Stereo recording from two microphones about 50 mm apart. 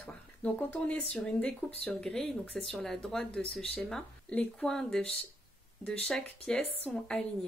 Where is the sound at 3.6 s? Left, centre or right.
Centre.